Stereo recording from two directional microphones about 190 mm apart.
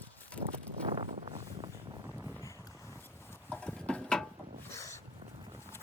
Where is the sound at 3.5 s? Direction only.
5° left (ahead or behind).